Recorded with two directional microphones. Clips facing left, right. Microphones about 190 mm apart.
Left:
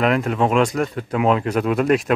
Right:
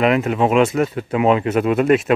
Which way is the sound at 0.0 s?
5° right (ahead or behind).